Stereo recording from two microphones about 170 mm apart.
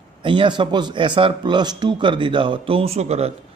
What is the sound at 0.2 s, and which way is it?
A man's voice, 30° right (ahead or behind).